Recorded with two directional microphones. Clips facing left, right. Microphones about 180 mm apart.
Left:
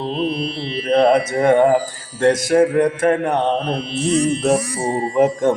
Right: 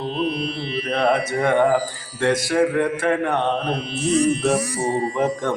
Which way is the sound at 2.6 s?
40° left (ahead or behind).